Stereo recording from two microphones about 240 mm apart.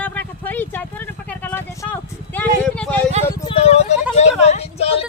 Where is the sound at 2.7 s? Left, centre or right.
Centre.